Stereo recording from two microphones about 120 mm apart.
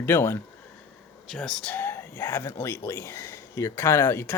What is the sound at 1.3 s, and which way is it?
Speech, centre (ahead or behind).